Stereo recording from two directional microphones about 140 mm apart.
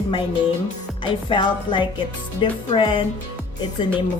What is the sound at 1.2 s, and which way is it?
Speech, 35° left (ahead or behind).